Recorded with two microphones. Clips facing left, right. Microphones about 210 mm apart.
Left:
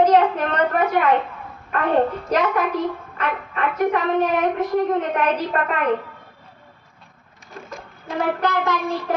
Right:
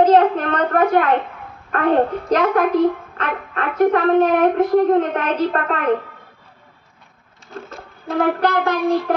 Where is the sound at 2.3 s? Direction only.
55° right (ahead or behind).